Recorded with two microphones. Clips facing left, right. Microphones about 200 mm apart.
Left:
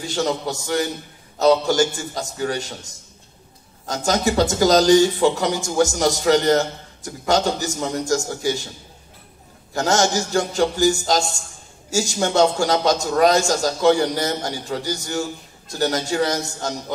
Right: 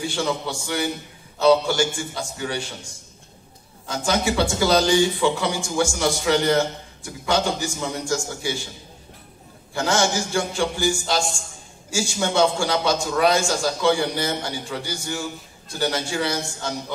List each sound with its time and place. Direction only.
0.0 s speech: 40° left (ahead or behind)
9.8 s speech: 40° left (ahead or behind)